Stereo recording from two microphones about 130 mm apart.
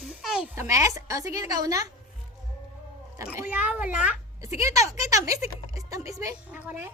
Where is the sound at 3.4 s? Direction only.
10° right (ahead or behind).